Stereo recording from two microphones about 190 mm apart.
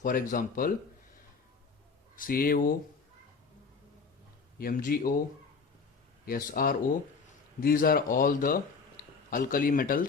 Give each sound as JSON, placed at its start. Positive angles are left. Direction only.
{"t": 0.0, "sound": "speech", "side_deg": 45}
{"t": 2.1, "sound": "speech", "side_deg": 50}
{"t": 4.5, "sound": "speech", "side_deg": 50}
{"t": 6.2, "sound": "speech", "side_deg": 50}
{"t": 9.0, "sound": "a sound", "side_deg": 45}
{"t": 9.3, "sound": "speech", "side_deg": 45}